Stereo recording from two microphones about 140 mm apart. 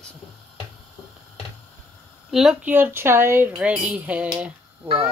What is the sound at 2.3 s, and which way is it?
Speech, centre (ahead or behind).